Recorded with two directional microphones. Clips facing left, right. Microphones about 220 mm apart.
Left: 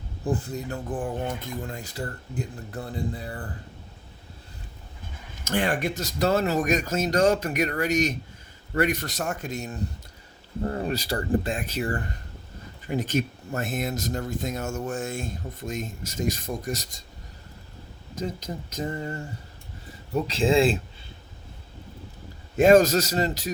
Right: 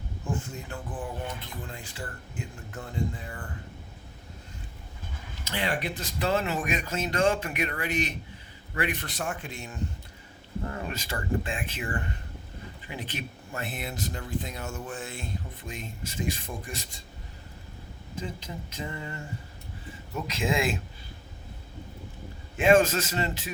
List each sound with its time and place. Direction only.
0.3 s speech: 35° left (ahead or behind)
5.5 s speech: 50° left (ahead or behind)
18.1 s speech: 40° left (ahead or behind)
20.1 s speech: 30° left (ahead or behind)
22.5 s speech: 40° left (ahead or behind)